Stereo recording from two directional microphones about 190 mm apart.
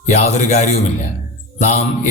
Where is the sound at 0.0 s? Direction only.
40° left (ahead or behind).